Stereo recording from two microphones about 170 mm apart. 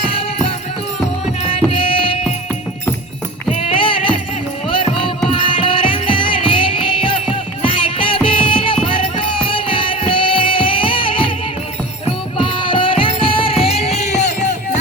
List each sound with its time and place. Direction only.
0.0 s music: 35° left (ahead or behind)
3.5 s music: 35° left (ahead or behind)